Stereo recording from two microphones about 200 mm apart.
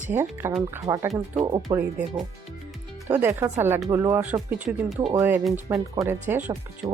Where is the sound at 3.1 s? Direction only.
10° right (ahead or behind).